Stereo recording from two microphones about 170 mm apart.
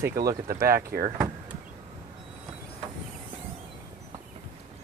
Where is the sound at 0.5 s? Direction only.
60° right (ahead or behind).